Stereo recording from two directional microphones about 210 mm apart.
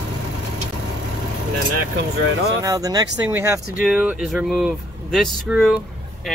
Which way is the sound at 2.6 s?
15° right (ahead or behind).